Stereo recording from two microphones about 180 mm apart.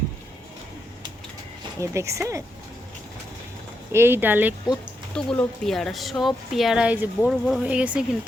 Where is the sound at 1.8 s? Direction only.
15° right (ahead or behind).